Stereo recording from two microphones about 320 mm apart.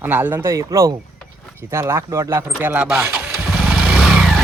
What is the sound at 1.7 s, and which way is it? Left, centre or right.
Vehicle, centre.